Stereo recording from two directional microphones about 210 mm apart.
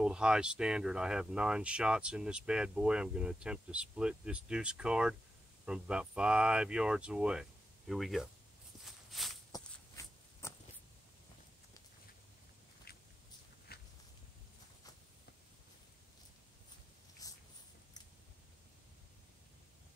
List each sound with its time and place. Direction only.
0.0 s speech: 5° right (ahead or behind)
8.8 s walk: centre (ahead or behind)
9.5 s walk: 15° left (ahead or behind)
12.9 s walk: 45° left (ahead or behind)
17.2 s a sound: 15° left (ahead or behind)